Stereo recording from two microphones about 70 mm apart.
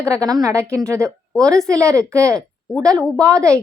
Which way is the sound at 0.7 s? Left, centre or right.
Right.